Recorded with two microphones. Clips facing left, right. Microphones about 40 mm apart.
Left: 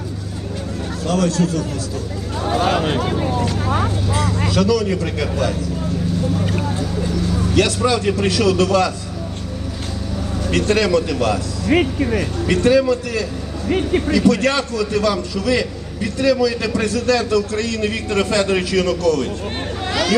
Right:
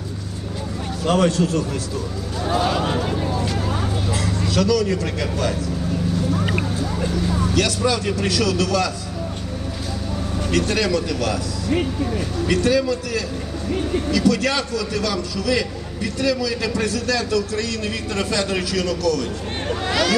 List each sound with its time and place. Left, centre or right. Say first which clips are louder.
1.0 s a man's voice: right 1 dB; right
2.6 s a sound: left 3 dB; left
3.1 s vehicle: left 3 dB; left
4.5 s a man's voice: left 1 dB; centre
6.4 s a sound: left 1 dB; right
7.5 s a man's voice: left 5 dB; left
8.4 s a man's voice: left 5 dB; left
10.5 s a man's voice: left 4 dB; left
11.7 s speech: left 6 dB; left
12.5 s a man's voice: left 4 dB; left
13.7 s speech: left 5 dB; left
14.1 s a man's voice: left 3 dB; left
16.2 s a man's voice: left 5 dB; centre; by 19.3 s left